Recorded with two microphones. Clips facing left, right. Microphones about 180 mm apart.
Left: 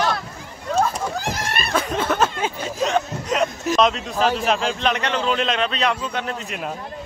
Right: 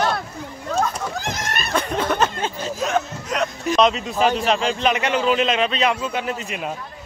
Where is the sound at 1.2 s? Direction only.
35° left (ahead or behind).